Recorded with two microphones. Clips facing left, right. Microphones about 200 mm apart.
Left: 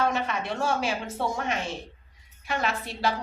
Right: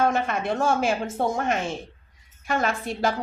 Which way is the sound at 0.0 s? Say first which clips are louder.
Right 4 dB; 50° right (ahead or behind).